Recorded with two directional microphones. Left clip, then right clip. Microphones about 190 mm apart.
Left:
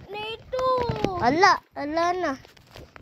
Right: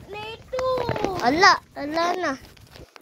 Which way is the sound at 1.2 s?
Centre (ahead or behind).